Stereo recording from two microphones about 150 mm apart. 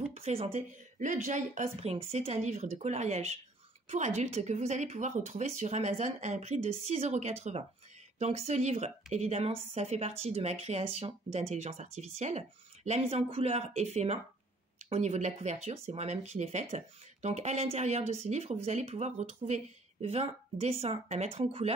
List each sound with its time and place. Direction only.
0.1 s speech: 40° right (ahead or behind)